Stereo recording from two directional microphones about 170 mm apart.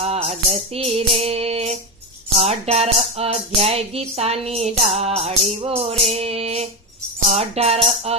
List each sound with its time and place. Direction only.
0.0 s music: 40° right (ahead or behind)